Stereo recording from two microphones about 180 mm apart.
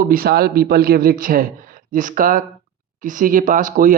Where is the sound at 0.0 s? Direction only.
55° right (ahead or behind).